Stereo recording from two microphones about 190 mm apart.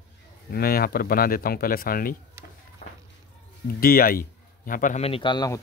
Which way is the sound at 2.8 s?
40° left (ahead or behind).